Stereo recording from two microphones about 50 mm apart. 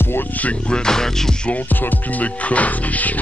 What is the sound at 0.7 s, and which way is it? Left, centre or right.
Speech, centre.